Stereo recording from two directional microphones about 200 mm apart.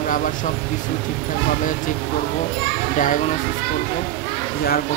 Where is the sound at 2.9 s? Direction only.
40° left (ahead or behind).